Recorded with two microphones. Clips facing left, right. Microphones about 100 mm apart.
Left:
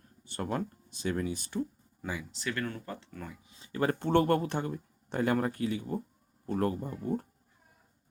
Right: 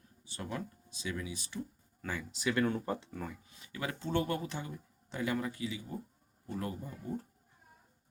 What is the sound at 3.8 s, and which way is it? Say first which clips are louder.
Speech: left 8 dB; 50° left (ahead or behind).